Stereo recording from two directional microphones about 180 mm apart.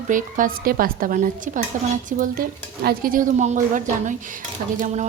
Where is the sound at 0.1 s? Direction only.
45° right (ahead or behind).